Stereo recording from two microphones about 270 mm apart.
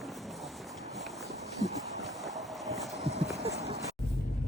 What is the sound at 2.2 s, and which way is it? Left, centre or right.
Boat, centre.